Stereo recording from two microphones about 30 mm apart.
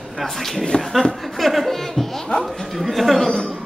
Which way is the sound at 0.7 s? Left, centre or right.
Left.